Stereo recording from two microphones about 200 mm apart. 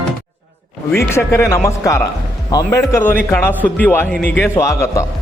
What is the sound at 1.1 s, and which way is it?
Speech, 15° left (ahead or behind).